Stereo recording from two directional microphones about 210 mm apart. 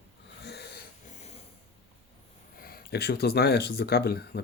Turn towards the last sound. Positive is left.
turn(degrees=50)  # may be behind; listen again after turning